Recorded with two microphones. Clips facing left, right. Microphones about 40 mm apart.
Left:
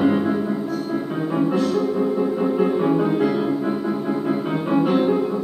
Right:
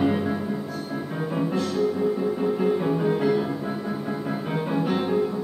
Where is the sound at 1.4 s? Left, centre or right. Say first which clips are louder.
Left 6 dB; centre.